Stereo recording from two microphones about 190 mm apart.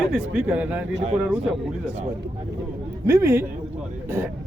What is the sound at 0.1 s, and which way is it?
Speech, 5° right (ahead or behind).